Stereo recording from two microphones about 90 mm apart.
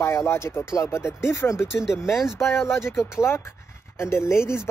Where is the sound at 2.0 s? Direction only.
Centre (ahead or behind).